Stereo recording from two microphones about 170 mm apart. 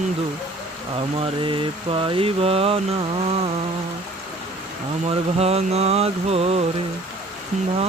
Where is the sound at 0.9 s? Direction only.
30° right (ahead or behind).